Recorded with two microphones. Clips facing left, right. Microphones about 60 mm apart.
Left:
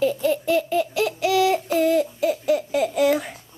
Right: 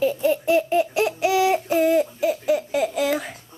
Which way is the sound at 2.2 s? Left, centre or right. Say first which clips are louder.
Even; centre.